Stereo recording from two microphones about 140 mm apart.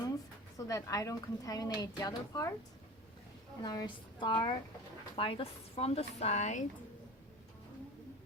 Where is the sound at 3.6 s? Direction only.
30° left (ahead or behind); by 6.6 s 55° left (ahead or behind).